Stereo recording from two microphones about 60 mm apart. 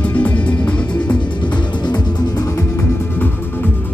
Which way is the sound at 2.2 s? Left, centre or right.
Left.